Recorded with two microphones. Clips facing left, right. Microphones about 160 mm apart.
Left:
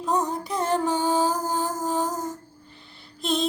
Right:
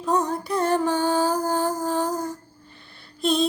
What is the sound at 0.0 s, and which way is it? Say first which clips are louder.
Female singing: right 2 dB; 20° left (ahead or behind).